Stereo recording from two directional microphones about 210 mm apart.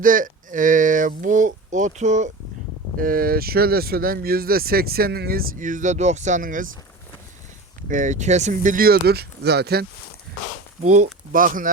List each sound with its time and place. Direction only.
0.0 s speech: 40° right (ahead or behind)
7.9 s speech: 40° right (ahead or behind)
10.8 s speech: 35° right (ahead or behind)